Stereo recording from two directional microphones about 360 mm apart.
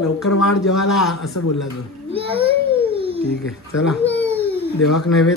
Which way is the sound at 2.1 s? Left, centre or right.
Centre.